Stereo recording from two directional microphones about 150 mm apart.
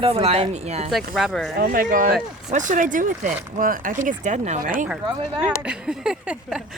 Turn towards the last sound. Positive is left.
turn(degrees=-5)  # may be behind; listen again after turning